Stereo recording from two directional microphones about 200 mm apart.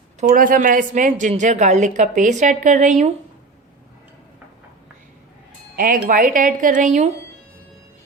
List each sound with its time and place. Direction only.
0.2 s a woman's voice: 45° right (ahead or behind)
5.7 s a woman's voice: 45° right (ahead or behind)